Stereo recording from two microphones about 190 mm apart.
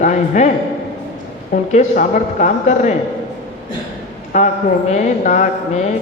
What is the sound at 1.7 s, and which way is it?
Mantra, 40° left (ahead or behind).